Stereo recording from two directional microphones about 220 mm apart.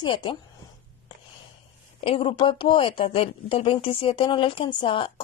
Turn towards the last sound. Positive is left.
turn(degrees=25)  # may be behind; listen again after turning